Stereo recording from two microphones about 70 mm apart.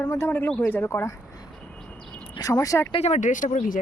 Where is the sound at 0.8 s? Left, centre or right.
Left.